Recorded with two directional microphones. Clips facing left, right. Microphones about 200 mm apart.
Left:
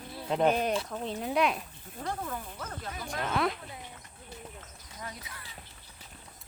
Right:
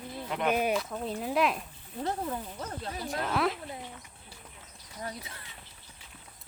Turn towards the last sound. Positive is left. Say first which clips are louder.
# right 4 dB
turn(degrees=-30)  # may be behind; listen again after turning